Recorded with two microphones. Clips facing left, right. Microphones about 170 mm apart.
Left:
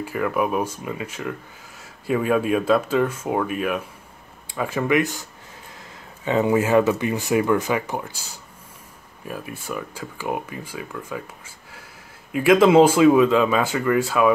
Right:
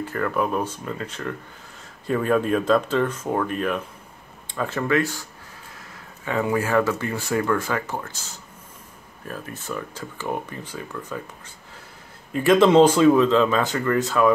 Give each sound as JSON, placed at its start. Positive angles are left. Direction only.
{"t": 0.0, "sound": "speech", "side_deg": 10}
{"t": 6.2, "sound": "speech", "side_deg": 20}
{"t": 9.2, "sound": "speech", "side_deg": 10}